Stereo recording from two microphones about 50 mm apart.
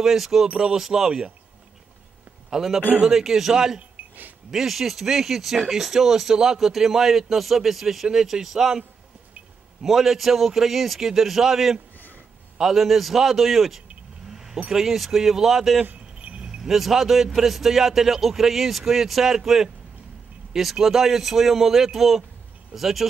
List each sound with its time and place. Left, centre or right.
0.0 s a man's voice: centre
3.1 s speech: centre
9.8 s a man's voice: centre
14.3 s vehicle: centre
14.7 s speech: centre
15.8 s a sound: right
16.4 s a man's voice: centre